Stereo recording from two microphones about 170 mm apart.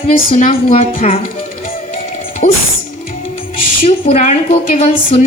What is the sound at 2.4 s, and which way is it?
Music, 55° left (ahead or behind).